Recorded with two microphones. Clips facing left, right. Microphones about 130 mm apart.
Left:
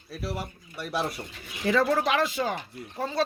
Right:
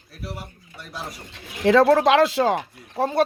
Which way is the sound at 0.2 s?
65° left (ahead or behind).